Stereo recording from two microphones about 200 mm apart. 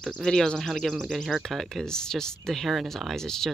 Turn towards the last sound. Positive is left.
turn(degrees=5)  # may be behind; listen again after turning